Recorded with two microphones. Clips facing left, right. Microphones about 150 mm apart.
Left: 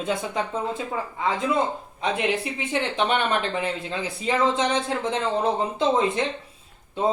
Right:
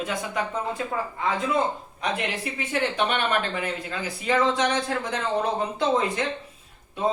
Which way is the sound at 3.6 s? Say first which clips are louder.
Left 2 dB; 25° left (ahead or behind).